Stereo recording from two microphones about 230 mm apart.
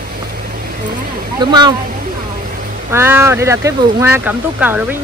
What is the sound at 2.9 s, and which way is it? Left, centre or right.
Speech, centre.